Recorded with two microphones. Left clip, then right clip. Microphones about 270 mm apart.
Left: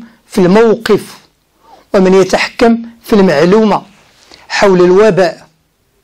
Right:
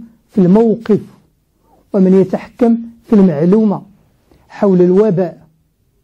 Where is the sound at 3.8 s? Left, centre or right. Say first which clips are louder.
Left 8 dB; centre.